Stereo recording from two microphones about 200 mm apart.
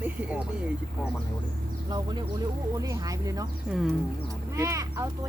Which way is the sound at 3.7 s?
Centre (ahead or behind).